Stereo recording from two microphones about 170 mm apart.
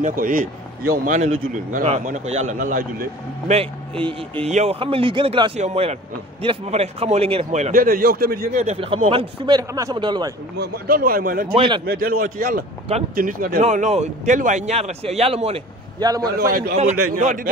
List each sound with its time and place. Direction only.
0.0 s a man's voice: 55° right (ahead or behind)
3.5 s speech: 35° right (ahead or behind)
7.7 s a man's voice: 55° right (ahead or behind)
8.6 s speech: 35° right (ahead or behind)
9.6 s speech: 20° right (ahead or behind)
10.6 s a man's voice: 60° right (ahead or behind)
11.5 s speech: 30° right (ahead or behind)
11.8 s a man's voice: 65° right (ahead or behind); by 15.6 s 35° right (ahead or behind)
16.0 s speech: 20° right (ahead or behind)
16.3 s a man's voice: 60° right (ahead or behind)
16.7 s a man's voice: 45° right (ahead or behind)